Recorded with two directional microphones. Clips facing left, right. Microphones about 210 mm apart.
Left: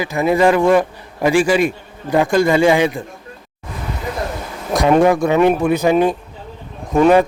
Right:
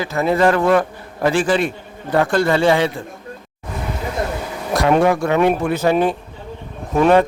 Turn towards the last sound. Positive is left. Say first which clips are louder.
# left 2 dB
turn(degrees=10)  # may be behind; listen again after turning